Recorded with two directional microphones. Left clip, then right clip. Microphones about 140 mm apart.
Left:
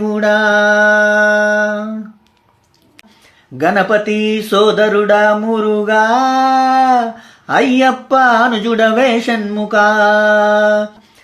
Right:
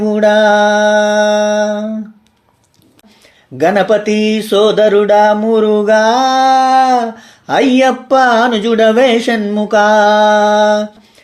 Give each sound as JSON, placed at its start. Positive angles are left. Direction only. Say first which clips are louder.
{"t": 0.0, "sound": "mantra", "louder": "right 3 dB", "side_deg": -25}
{"t": 3.6, "sound": "speech", "louder": "right 2 dB", "side_deg": -40}